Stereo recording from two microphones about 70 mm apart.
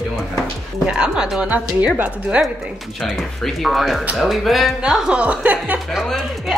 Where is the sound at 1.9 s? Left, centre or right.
Right.